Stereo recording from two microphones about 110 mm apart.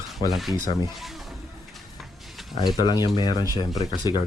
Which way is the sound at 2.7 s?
40° left (ahead or behind).